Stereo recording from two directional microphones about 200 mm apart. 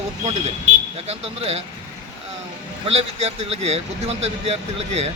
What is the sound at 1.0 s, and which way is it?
Speech, 30° right (ahead or behind).